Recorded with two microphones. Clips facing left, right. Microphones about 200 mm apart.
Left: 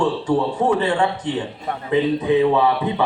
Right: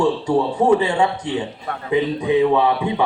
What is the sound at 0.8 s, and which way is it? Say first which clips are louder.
Speech: right 1 dB; 10° right (ahead or behind).